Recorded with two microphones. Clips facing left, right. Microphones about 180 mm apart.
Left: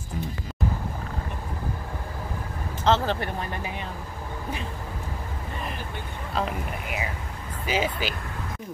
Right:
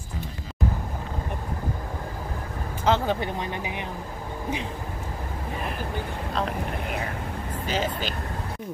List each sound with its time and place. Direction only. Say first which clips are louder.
2.8 s speech: even; 10° right (ahead or behind)
6.3 s speech: even; 5° left (ahead or behind)